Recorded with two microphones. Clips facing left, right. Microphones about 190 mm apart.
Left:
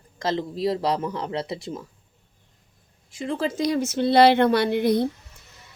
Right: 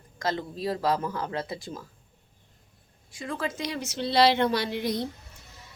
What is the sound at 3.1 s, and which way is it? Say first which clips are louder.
Speech: left 6 dB; 25° left (ahead or behind).